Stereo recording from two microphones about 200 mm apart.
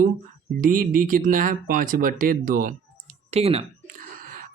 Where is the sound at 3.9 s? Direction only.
45° right (ahead or behind).